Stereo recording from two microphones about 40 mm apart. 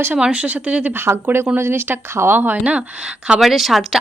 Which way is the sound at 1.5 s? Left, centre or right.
Right.